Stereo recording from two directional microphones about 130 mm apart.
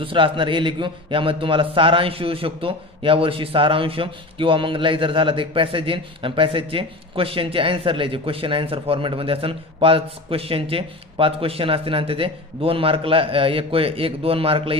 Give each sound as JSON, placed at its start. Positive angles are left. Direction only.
{"t": 0.0, "sound": "a man's voice", "side_deg": -40}